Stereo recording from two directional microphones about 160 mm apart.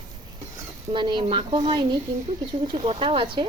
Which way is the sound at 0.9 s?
30° right (ahead or behind).